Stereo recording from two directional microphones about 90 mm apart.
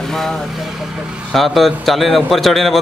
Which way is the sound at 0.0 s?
5° left (ahead or behind).